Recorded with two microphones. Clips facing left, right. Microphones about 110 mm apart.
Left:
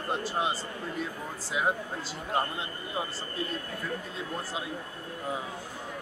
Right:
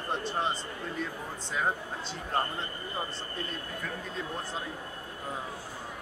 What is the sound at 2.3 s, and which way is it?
Speech, 10° left (ahead or behind).